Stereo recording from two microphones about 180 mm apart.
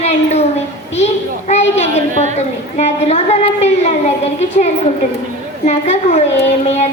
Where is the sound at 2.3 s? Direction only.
40° left (ahead or behind).